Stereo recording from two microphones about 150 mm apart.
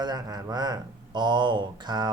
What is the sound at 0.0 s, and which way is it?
Speech, 25° right (ahead or behind).